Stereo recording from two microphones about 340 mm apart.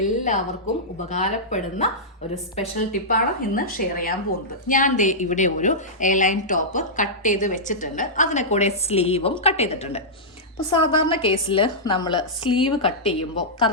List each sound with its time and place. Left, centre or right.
0.0 s a sound: left
1.1 s speech: left
11.0 s a woman's voice: centre